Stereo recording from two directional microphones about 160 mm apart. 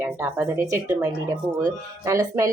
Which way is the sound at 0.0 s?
15° right (ahead or behind).